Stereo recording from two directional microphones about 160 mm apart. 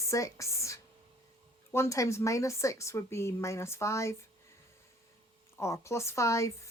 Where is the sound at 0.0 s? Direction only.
20° left (ahead or behind).